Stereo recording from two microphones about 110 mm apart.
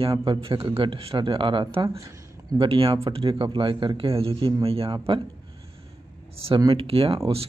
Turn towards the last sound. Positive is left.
turn(degrees=-55)  # may be behind; listen again after turning